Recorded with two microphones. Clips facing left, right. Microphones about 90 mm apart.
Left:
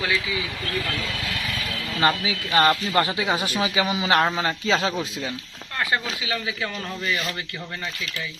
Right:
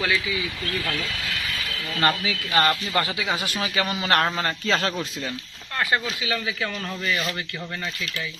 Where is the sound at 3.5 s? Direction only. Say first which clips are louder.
Left 3 dB; 15° left (ahead or behind).